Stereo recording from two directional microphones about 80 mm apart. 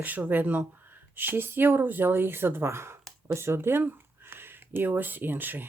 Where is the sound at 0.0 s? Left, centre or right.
Right.